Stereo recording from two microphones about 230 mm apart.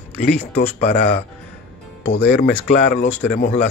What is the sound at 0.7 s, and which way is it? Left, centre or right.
Speech, left.